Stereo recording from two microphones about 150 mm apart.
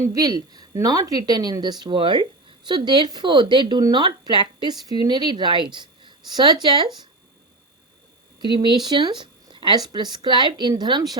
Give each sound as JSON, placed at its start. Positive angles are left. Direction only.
{"t": 0.0, "sound": "speech", "side_deg": -25}
{"t": 8.4, "sound": "speech", "side_deg": -30}